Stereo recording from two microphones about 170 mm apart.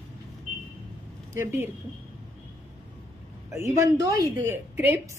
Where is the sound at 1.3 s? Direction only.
15° right (ahead or behind).